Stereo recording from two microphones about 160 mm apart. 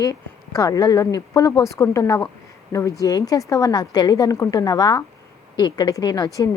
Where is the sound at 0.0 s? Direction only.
20° left (ahead or behind).